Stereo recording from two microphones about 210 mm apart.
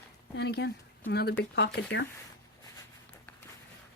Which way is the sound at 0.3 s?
50° left (ahead or behind).